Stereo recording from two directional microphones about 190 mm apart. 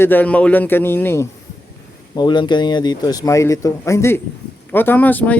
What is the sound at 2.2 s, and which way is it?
A man's voice, 25° left (ahead or behind).